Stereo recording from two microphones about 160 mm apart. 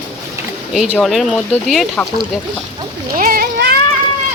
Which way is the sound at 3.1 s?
65° right (ahead or behind).